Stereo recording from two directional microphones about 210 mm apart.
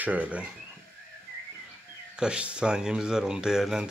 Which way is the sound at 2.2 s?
5° right (ahead or behind).